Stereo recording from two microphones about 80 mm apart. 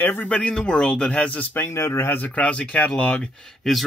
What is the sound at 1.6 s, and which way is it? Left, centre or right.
Speech, left.